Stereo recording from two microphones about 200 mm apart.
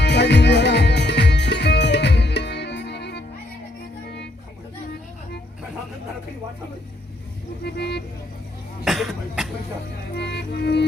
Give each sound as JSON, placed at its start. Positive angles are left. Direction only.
{"t": 0.0, "sound": "music", "side_deg": 60}
{"t": 7.6, "sound": "vehicle", "side_deg": 55}
{"t": 8.8, "sound": "cough", "side_deg": 0}
{"t": 10.2, "sound": "music", "side_deg": 55}